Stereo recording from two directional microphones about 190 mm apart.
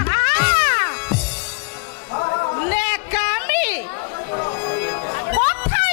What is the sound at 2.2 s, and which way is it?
Music, 25° left (ahead or behind).